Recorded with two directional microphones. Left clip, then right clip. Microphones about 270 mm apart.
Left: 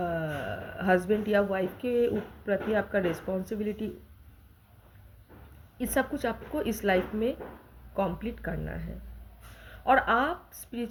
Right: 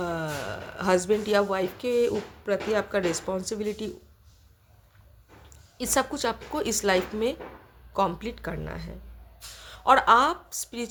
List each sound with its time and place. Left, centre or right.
0.0 s a woman's voice: centre
5.7 s a woman's voice: centre